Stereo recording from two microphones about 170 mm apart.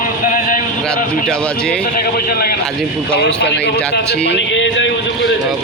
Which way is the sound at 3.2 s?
90° left.